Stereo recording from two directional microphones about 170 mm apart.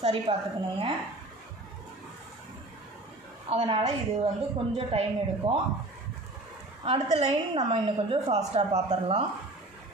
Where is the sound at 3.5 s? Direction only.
35° right (ahead or behind).